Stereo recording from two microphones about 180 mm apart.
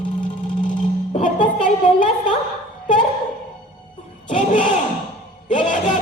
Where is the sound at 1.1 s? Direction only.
40° left (ahead or behind).